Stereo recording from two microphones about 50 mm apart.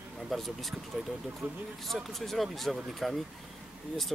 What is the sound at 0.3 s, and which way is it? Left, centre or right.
Speech, centre.